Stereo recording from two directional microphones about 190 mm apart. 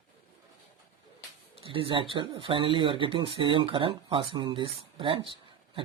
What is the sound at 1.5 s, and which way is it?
Speech, 30° right (ahead or behind).